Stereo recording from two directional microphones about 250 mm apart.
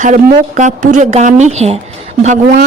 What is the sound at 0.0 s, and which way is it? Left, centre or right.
A woman's voice, right.